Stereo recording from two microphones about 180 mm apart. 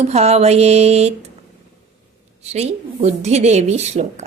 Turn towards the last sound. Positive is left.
turn(degrees=-40)  # may be behind; listen again after turning